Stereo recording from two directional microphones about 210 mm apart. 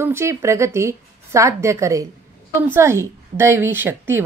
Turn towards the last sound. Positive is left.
turn(degrees=-10)  # may be behind; listen again after turning